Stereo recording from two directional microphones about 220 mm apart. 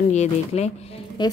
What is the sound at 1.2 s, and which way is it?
Speech, 20° left (ahead or behind).